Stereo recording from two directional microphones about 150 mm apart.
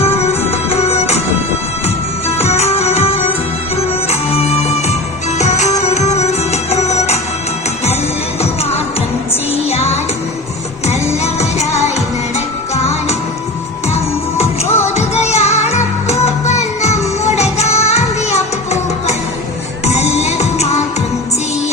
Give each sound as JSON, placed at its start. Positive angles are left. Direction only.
{"t": 0.5, "sound": "music", "side_deg": 45}
{"t": 9.6, "sound": "music", "side_deg": 45}
{"t": 11.2, "sound": "music", "side_deg": 45}
{"t": 14.4, "sound": "music", "side_deg": 15}
{"t": 14.8, "sound": "music", "side_deg": 45}